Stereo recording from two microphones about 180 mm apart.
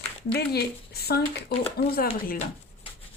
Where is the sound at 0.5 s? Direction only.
60° left (ahead or behind).